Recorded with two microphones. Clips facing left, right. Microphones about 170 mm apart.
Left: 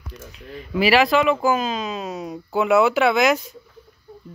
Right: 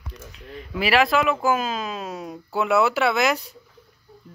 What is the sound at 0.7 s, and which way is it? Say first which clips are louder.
Speech: left 3 dB; centre (ahead or behind).